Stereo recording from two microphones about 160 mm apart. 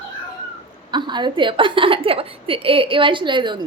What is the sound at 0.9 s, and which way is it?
A woman's voice, 30° right (ahead or behind).